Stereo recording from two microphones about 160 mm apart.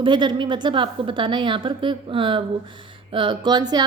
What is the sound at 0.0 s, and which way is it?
Speech, 30° right (ahead or behind).